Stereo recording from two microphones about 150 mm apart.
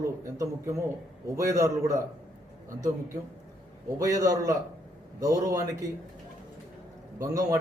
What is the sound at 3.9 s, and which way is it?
A man's voice, 25° right (ahead or behind).